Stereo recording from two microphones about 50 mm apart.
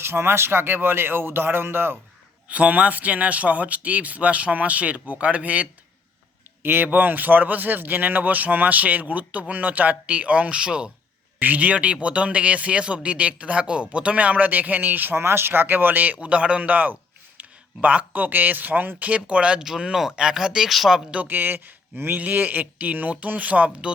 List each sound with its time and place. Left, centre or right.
0.0 s speech: right
2.5 s a man's voice: right
6.6 s speech: right
6.8 s speech: right; by 10.9 s centre
11.3 s a man's voice: right
15.2 s speech: right
19.8 s speech: centre
21.2 s a man's voice: right